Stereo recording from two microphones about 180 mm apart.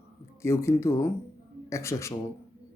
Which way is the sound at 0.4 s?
15° left (ahead or behind).